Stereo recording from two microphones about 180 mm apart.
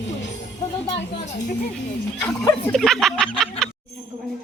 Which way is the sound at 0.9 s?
40° left (ahead or behind).